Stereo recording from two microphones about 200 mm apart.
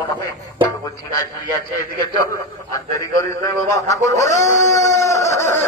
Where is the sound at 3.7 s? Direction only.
15° left (ahead or behind).